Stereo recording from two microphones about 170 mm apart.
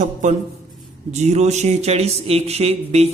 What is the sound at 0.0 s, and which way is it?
A man's voice, 45° right (ahead or behind).